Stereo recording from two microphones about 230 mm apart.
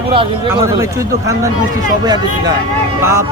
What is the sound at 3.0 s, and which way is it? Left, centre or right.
Speech, centre.